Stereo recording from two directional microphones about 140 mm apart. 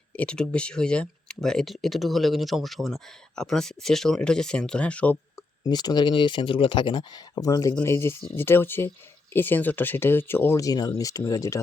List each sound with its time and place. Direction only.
0.2 s speech: 5° left (ahead or behind)
5.6 s speech: 30° left (ahead or behind)